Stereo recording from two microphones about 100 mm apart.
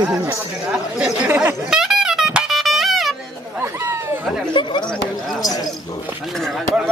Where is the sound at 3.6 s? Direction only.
25° right (ahead or behind).